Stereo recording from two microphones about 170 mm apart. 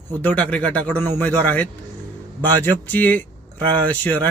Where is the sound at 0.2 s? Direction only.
10° left (ahead or behind).